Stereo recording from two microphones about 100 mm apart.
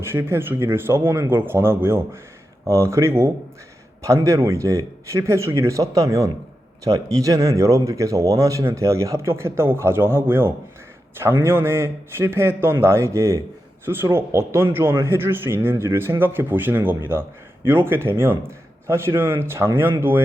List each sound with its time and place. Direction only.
0.0 s speech: 25° right (ahead or behind)